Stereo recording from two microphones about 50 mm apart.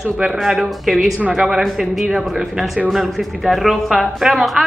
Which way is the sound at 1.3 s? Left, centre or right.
Centre.